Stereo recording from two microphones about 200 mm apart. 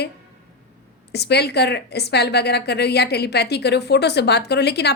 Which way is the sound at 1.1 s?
55° left (ahead or behind).